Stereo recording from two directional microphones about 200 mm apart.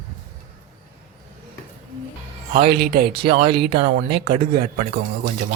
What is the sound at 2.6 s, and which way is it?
Speech, 50° right (ahead or behind).